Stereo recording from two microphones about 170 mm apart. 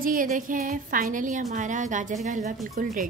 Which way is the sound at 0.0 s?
55° right (ahead or behind).